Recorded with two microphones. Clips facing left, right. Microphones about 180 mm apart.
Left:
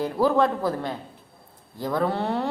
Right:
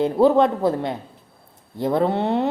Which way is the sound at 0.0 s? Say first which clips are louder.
Right 5 dB; 25° right (ahead or behind).